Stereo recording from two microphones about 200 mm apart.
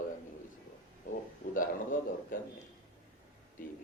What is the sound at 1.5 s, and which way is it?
Speech, 45° left (ahead or behind).